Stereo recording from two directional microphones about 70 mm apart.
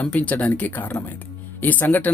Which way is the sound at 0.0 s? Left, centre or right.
Left.